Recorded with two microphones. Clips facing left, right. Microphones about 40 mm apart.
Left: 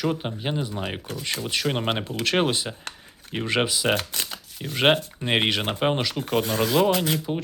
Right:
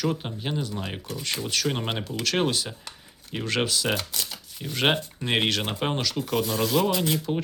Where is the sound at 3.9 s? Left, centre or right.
Left.